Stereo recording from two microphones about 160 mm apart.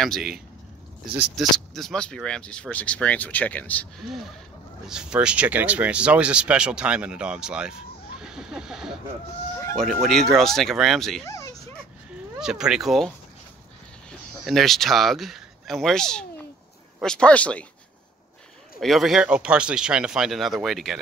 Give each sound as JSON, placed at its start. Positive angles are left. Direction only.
{"t": 0.0, "sound": "speech", "side_deg": 0}
{"t": 10.0, "sound": "speech", "side_deg": 0}
{"t": 11.2, "sound": "dog", "side_deg": 20}
{"t": 12.4, "sound": "speech", "side_deg": -5}
{"t": 14.4, "sound": "speech", "side_deg": 0}
{"t": 18.8, "sound": "speech", "side_deg": 0}